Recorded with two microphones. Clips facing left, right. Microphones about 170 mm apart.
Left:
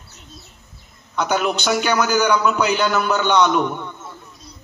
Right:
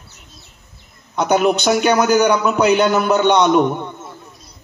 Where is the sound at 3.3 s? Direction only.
35° right (ahead or behind).